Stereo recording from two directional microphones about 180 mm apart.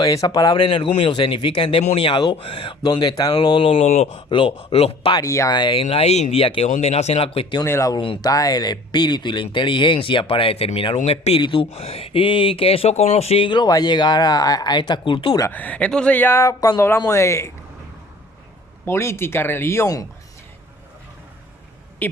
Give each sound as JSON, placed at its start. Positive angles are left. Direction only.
{"t": 0.0, "sound": "speech", "side_deg": 20}
{"t": 5.2, "sound": "speech", "side_deg": 20}
{"t": 7.6, "sound": "speech", "side_deg": 15}
{"t": 15.4, "sound": "speech", "side_deg": 10}
{"t": 18.9, "sound": "speech", "side_deg": 15}
{"t": 22.0, "sound": "speech", "side_deg": 10}